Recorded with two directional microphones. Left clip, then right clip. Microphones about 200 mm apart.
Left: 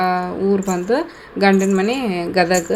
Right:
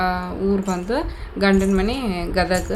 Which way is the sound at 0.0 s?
10° left (ahead or behind).